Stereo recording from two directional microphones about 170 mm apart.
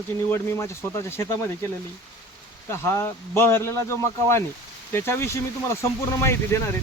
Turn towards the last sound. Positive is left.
turn(degrees=15)  # may be behind; listen again after turning